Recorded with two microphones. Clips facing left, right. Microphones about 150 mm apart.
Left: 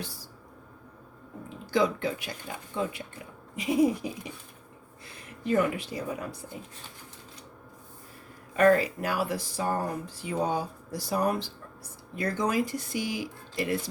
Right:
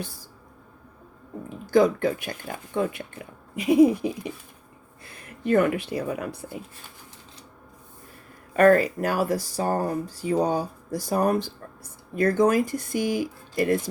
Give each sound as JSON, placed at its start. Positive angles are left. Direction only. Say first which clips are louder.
{"t": 1.7, "sound": "speech", "louder": "right 7 dB", "side_deg": -50}
{"t": 5.5, "sound": "speech", "louder": "right 5 dB", "side_deg": -55}
{"t": 8.5, "sound": "speech", "louder": "right 4 dB", "side_deg": -55}